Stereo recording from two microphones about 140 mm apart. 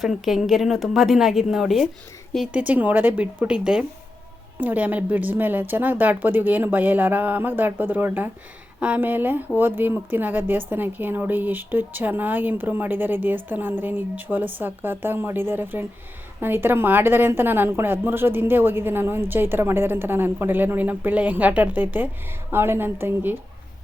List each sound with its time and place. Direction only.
0.0 s a woman's voice: centre (ahead or behind)